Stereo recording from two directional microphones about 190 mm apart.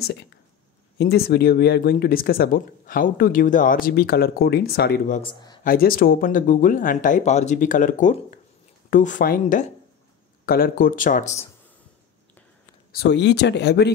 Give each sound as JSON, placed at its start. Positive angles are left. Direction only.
{"t": 0.0, "sound": "speech", "side_deg": 60}
{"t": 5.2, "sound": "speech", "side_deg": 25}
{"t": 5.6, "sound": "speech", "side_deg": 50}
{"t": 12.9, "sound": "speech", "side_deg": 60}